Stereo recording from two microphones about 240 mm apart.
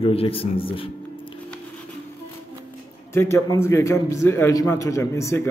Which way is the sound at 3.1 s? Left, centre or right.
Centre.